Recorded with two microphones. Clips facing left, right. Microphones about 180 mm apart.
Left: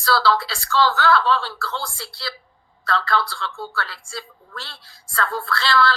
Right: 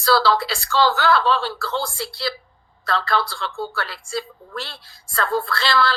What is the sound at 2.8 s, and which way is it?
A man's voice, 15° right (ahead or behind).